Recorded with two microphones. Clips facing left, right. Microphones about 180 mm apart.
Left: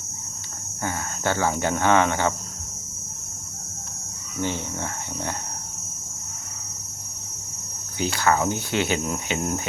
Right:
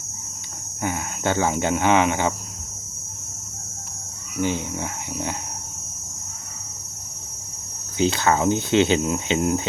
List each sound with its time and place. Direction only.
0.8 s speech: 15° right (ahead or behind)
4.4 s speech: 15° right (ahead or behind)
7.9 s cricket: 20° right (ahead or behind)